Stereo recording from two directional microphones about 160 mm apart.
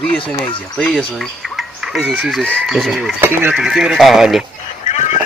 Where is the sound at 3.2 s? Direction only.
15° right (ahead or behind).